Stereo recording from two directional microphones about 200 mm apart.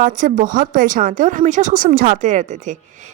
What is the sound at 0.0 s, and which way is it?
A woman's voice, 40° right (ahead or behind).